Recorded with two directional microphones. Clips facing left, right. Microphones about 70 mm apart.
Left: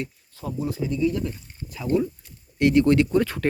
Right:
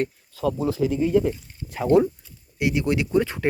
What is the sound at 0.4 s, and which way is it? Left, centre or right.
Speech, right.